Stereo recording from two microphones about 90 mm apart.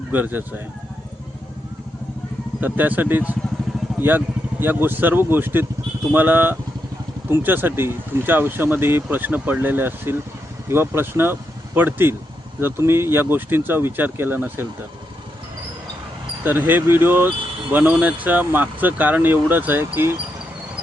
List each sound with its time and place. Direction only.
0.1 s speech: 20° right (ahead or behind)
2.6 s speech: 20° right (ahead or behind)
4.6 s speech: 25° right (ahead or behind)
16.4 s speech: 20° right (ahead or behind)